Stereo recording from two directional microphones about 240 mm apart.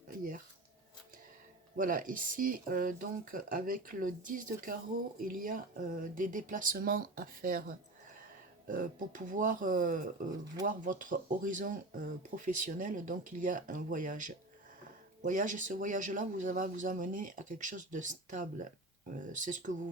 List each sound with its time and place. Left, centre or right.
1.7 s speech: right